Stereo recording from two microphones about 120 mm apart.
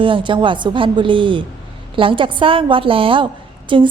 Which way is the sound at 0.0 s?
45° right (ahead or behind).